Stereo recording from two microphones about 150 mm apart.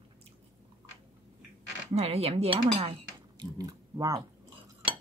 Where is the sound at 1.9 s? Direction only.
40° right (ahead or behind).